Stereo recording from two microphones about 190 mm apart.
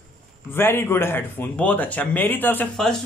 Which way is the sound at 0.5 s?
10° left (ahead or behind).